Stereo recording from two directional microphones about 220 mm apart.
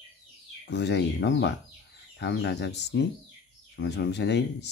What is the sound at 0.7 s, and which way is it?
Speech, 50° left (ahead or behind).